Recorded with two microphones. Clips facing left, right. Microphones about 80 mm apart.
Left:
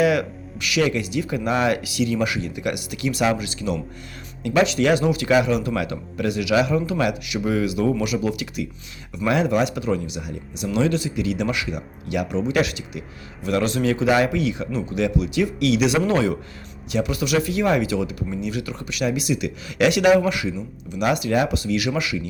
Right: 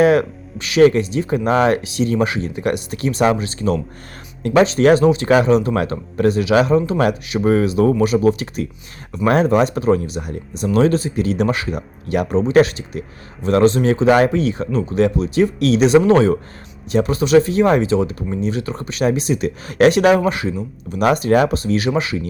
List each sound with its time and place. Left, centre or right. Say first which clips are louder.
0.0 s speech: right 6 dB; right